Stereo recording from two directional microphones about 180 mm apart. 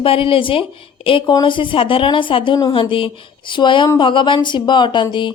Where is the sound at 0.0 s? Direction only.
30° left (ahead or behind).